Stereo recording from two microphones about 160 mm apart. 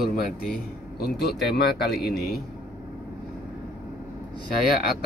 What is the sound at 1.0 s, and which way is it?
Speech, 80° left.